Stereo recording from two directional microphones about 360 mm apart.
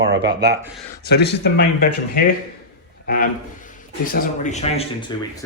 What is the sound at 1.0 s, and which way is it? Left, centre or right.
Speech, left.